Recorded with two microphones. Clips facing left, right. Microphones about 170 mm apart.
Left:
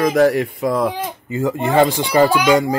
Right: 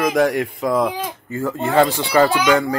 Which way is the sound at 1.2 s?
15° left (ahead or behind).